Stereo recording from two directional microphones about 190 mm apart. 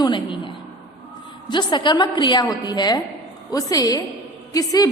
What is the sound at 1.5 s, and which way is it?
A woman's voice, 25° left (ahead or behind).